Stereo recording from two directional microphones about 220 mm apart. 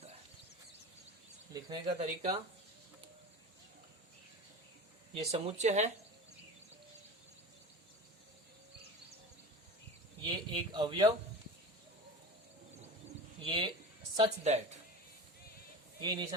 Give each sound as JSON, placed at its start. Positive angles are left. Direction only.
{"t": 1.5, "sound": "speech", "side_deg": -20}
{"t": 5.1, "sound": "speech", "side_deg": -25}
{"t": 10.2, "sound": "speech", "side_deg": -20}
{"t": 13.4, "sound": "speech", "side_deg": -25}
{"t": 16.0, "sound": "speech", "side_deg": -20}